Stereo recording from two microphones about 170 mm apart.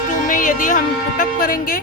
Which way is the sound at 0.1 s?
50° left (ahead or behind).